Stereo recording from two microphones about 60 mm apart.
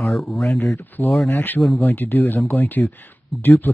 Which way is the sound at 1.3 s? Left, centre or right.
Left.